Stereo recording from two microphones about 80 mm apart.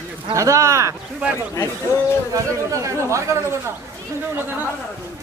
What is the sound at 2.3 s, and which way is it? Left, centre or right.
A man's voice, right.